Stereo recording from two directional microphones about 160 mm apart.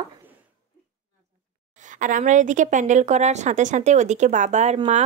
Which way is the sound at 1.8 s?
55° right (ahead or behind).